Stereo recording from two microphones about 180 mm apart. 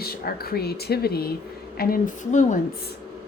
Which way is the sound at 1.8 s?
50° left (ahead or behind).